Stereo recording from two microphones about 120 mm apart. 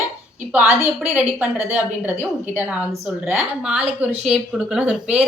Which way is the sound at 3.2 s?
10° right (ahead or behind).